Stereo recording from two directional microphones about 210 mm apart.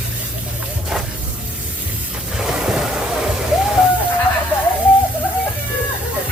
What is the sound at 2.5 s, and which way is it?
Waves, 5° right (ahead or behind).